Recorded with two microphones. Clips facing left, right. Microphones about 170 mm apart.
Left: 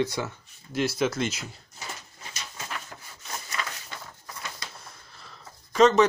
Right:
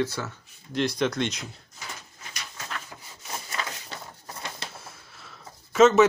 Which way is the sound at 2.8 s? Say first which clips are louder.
Right 1 dB; 15° right (ahead or behind).